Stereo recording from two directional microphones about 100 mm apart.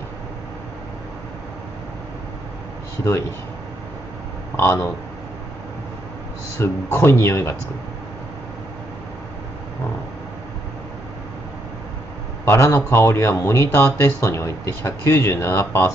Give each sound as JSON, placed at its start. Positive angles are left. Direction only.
{"t": 3.0, "sound": "speech", "side_deg": 30}
{"t": 4.6, "sound": "speech", "side_deg": 25}
{"t": 6.6, "sound": "speech", "side_deg": 25}
{"t": 12.4, "sound": "speech", "side_deg": 25}
{"t": 13.7, "sound": "speech", "side_deg": 15}
{"t": 14.0, "sound": "speech", "side_deg": 30}